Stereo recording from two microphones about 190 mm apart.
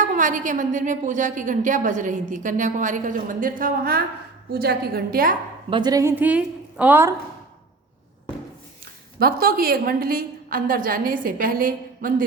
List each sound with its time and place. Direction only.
0.0 s a woman's voice: 40° right (ahead or behind)
5.7 s a woman's voice: 20° right (ahead or behind)
9.1 s a woman's voice: 50° right (ahead or behind)